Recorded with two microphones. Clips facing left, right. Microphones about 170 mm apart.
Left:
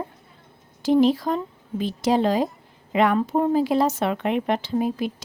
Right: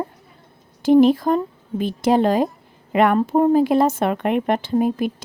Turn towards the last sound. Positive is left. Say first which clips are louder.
# right 4 dB
turn(degrees=-50)  # may be behind; listen again after turning